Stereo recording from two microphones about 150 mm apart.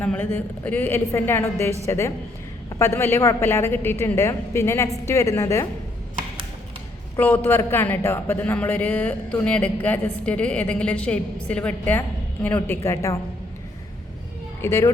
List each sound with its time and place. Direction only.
0.0 s a woman's voice: 10° left (ahead or behind)
7.2 s speech: 10° left (ahead or behind)
14.6 s speech: 20° left (ahead or behind)